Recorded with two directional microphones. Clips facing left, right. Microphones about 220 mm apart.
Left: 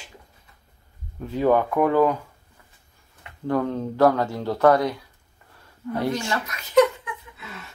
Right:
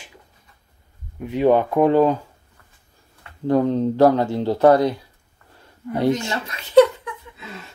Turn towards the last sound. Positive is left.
turn(degrees=-30)  # may be behind; listen again after turning